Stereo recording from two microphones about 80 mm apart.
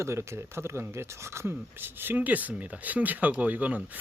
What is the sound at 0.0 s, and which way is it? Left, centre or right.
Speech, right.